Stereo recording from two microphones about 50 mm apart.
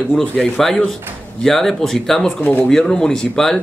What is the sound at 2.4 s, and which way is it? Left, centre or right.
Speech, left.